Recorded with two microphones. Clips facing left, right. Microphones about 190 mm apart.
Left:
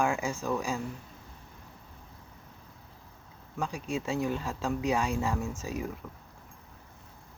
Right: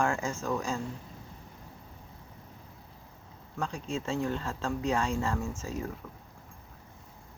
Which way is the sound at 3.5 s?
15° left (ahead or behind).